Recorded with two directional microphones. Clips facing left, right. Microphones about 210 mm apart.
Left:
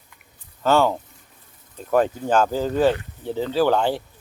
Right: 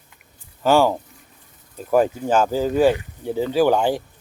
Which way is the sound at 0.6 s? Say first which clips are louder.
Right 2 dB; 15° right (ahead or behind).